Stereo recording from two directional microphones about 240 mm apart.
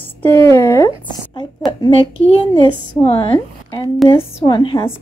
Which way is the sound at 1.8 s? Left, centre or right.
Left.